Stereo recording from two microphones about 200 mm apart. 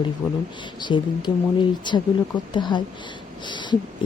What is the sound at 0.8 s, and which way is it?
Speech, 20° left (ahead or behind).